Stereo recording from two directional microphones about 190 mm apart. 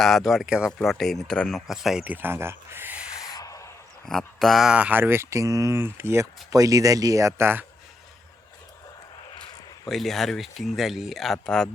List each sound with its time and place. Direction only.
0.0 s speech: centre (ahead or behind)
3.2 s a sound: 20° left (ahead or behind)
4.0 s speech: 5° left (ahead or behind); by 7.6 s 15° right (ahead or behind)
9.8 s speech: centre (ahead or behind)